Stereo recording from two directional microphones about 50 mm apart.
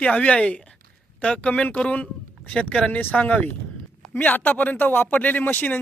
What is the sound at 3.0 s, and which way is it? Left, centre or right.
Speech, left.